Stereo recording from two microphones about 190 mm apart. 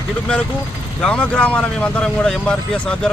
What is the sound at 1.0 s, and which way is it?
Speech, 5° left (ahead or behind).